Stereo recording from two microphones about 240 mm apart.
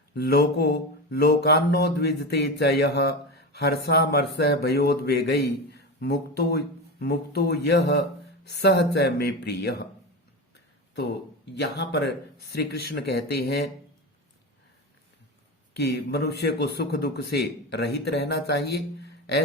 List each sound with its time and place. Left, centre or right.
0.1 s a man's voice: left
11.5 s speech: left
15.7 s a man's voice: left